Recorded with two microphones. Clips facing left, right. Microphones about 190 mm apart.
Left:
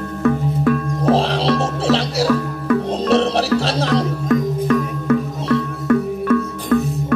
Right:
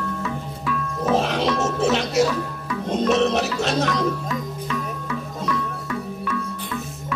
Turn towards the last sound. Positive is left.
turn(degrees=55)  # may be behind; listen again after turning